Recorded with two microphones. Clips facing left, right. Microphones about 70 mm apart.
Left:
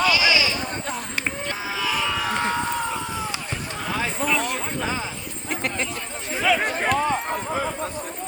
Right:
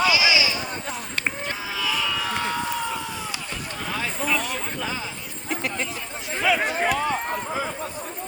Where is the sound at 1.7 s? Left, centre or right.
Left.